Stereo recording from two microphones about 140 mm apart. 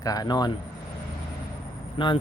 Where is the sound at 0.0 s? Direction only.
25° left (ahead or behind).